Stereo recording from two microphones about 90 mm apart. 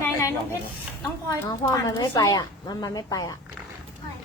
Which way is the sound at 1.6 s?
40° left (ahead or behind).